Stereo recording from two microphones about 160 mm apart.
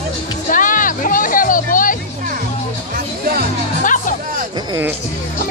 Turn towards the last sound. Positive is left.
turn(degrees=55)  # may be behind; listen again after turning